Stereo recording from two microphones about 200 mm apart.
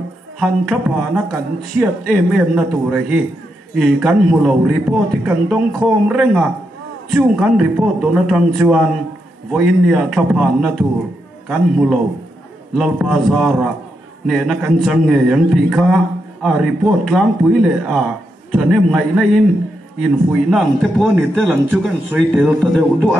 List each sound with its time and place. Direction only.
0.4 s a man's voice: centre (ahead or behind)